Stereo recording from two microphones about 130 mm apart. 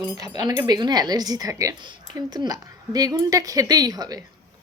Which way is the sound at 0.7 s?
30° right (ahead or behind).